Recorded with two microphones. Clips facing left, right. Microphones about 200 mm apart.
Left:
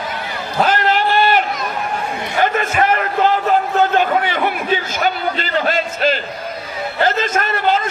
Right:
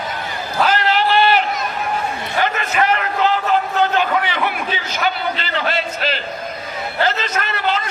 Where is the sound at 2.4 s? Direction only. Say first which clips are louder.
Left 3 dB; 50° left (ahead or behind).